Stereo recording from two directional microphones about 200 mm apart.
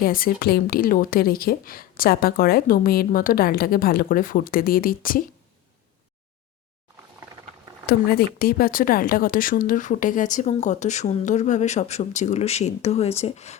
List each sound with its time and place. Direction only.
0.0 s a woman's voice: 45° left (ahead or behind)
8.4 s speech: 50° left (ahead or behind)